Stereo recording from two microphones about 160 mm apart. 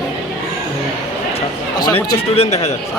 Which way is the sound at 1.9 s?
40° left (ahead or behind).